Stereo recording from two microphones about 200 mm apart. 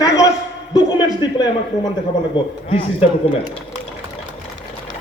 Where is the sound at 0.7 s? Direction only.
20° left (ahead or behind).